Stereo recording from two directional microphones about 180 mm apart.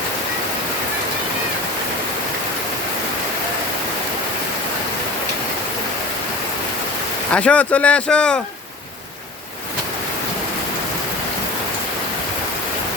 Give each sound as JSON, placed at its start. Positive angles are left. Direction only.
{"t": 7.3, "sound": "speech", "side_deg": 5}